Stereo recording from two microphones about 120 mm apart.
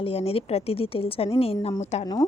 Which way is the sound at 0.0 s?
55° left (ahead or behind).